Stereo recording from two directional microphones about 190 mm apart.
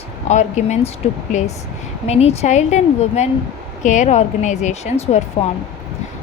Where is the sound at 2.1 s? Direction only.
35° left (ahead or behind).